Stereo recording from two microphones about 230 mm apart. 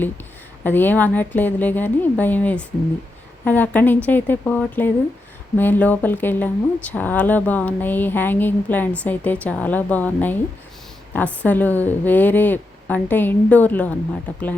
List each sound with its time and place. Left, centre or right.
0.6 s a woman's voice: centre